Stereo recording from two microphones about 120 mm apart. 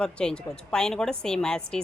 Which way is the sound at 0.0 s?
5° left (ahead or behind).